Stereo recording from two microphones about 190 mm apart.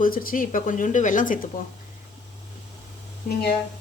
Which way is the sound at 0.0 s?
50° left (ahead or behind).